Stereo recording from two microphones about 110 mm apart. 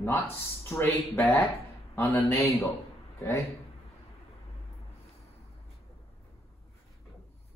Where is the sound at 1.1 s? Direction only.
20° left (ahead or behind).